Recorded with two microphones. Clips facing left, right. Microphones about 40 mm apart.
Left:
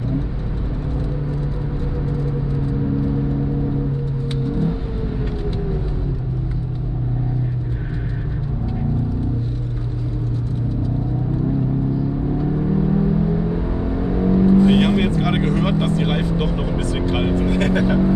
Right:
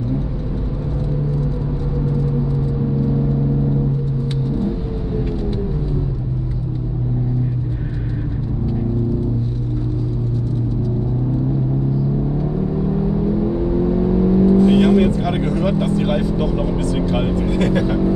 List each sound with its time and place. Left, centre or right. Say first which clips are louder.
13.4 s vehicle: right 5 dB; centre
14.7 s vehicle: right 3 dB; left
17.6 s music: right 2 dB; left